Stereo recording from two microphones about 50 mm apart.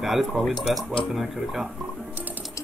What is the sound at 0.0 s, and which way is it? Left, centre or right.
Speech, centre.